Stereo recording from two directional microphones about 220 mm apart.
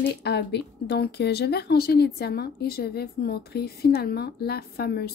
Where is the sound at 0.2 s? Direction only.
50° left (ahead or behind).